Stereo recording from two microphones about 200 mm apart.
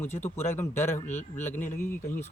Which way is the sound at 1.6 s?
40° left (ahead or behind).